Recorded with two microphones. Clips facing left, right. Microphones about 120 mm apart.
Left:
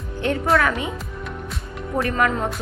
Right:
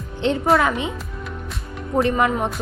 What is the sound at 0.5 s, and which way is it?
Speech, 20° right (ahead or behind).